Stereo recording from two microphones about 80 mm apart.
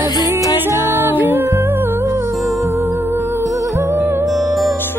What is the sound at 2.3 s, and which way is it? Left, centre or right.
Music, centre.